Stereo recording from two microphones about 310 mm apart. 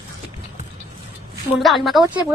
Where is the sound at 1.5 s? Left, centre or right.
Centre.